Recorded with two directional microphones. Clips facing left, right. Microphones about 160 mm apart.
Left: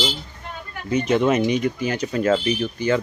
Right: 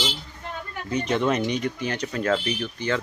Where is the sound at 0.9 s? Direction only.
5° left (ahead or behind).